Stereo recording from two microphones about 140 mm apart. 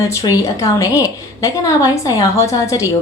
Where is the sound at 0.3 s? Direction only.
25° left (ahead or behind).